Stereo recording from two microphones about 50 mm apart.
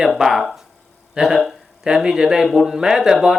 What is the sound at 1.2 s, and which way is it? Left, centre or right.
Speech, centre.